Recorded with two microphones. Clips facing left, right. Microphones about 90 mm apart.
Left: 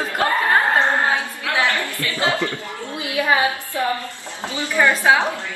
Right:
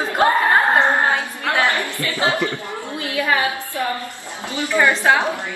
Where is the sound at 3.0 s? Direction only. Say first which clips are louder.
Left 1 dB; 20° left (ahead or behind).